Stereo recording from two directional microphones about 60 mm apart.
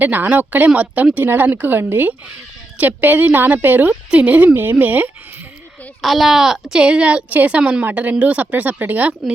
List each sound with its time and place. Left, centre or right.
0.0 s a woman's voice: right
6.0 s a woman's voice: centre; by 9.3 s right